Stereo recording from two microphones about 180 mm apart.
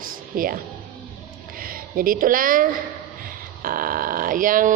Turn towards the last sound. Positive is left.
turn(degrees=-50)  # may be behind; listen again after turning